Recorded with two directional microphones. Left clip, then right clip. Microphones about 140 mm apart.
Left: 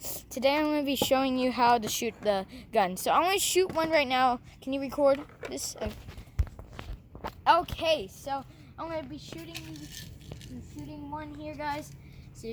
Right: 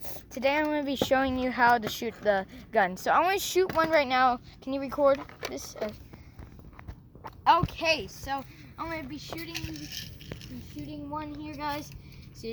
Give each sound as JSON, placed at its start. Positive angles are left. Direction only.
{"t": 0.0, "sound": "speech", "side_deg": 30}
{"t": 7.4, "sound": "speech", "side_deg": 25}
{"t": 9.5, "sound": "a child's voice", "side_deg": -30}
{"t": 11.2, "sound": "speech", "side_deg": 5}